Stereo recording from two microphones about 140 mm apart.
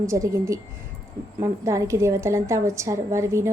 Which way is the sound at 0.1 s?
20° right (ahead or behind).